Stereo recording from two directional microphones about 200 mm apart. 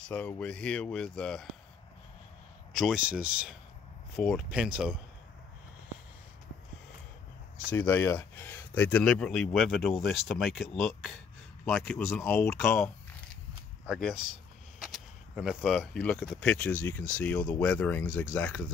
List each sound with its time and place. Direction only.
0.1 s speech: 10° left (ahead or behind)
2.7 s speech: centre (ahead or behind)
7.7 s speech: 10° left (ahead or behind)
13.8 s speech: centre (ahead or behind)